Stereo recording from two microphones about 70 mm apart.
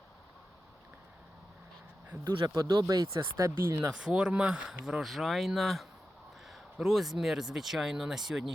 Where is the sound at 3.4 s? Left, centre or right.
Right.